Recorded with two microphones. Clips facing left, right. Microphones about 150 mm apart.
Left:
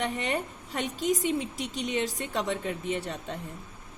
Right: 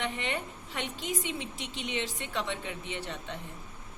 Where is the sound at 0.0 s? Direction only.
45° left (ahead or behind).